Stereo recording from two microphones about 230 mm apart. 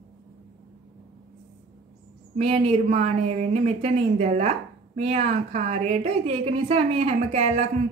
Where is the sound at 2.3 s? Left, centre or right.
Right.